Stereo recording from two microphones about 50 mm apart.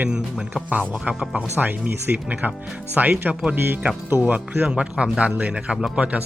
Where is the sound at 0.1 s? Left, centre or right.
Centre.